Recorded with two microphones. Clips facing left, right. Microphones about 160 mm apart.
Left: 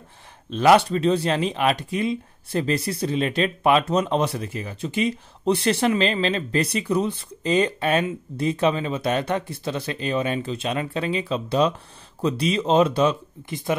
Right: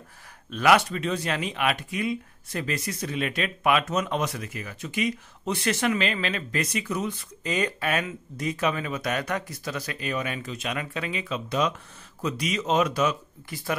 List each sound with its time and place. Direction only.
0.5 s speech: 30° left (ahead or behind)